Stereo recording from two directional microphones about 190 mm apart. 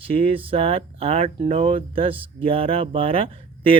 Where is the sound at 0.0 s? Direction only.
30° right (ahead or behind).